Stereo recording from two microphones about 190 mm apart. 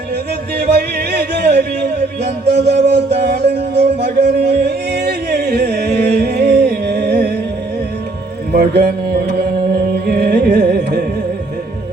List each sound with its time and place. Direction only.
0.8 s music: 60° right (ahead or behind)
2.5 s music: 35° right (ahead or behind)
2.8 s music: 60° right (ahead or behind)
8.5 s music: 55° right (ahead or behind)
10.1 s carnatic music: 55° right (ahead or behind)